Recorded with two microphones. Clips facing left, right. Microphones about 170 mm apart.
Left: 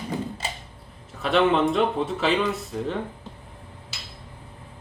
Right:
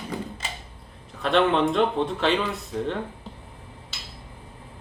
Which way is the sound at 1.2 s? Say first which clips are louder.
Left 1 dB; centre (ahead or behind).